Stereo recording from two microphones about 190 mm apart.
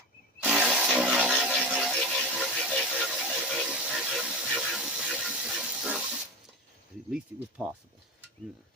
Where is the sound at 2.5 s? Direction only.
Centre (ahead or behind).